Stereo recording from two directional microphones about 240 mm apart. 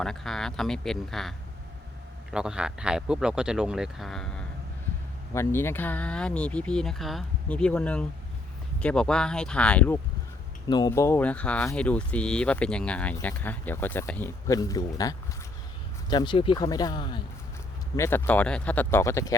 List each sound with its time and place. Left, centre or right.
0.0 s speech: centre
2.3 s speech: centre
10.7 s speech: centre